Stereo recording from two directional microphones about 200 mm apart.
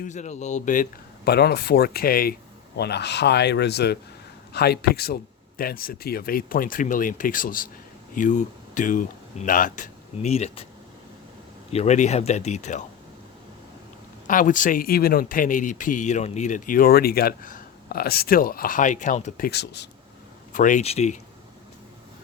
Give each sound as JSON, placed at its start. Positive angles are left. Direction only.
{"t": 0.0, "sound": "speech", "side_deg": 35}
{"t": 11.7, "sound": "speech", "side_deg": 35}
{"t": 14.3, "sound": "speech", "side_deg": 40}
{"t": 19.5, "sound": "speech", "side_deg": 55}
{"t": 20.5, "sound": "speech", "side_deg": 40}